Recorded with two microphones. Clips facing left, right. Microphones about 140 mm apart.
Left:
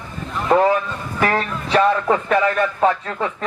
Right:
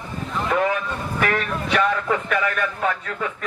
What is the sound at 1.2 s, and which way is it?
Speech, 35° left (ahead or behind).